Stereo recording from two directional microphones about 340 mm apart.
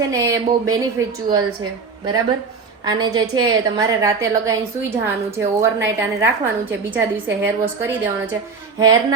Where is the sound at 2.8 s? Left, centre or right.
Centre.